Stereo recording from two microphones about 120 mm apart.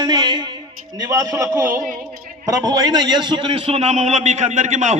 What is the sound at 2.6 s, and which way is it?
A man's voice, 35° right (ahead or behind).